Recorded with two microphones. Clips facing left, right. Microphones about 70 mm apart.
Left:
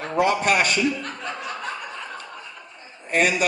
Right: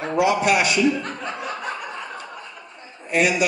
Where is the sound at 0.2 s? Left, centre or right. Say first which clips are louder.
Right 1 dB; left.